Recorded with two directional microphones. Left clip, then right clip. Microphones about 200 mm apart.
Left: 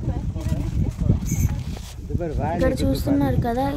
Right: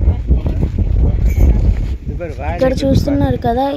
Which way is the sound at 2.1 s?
55° right (ahead or behind).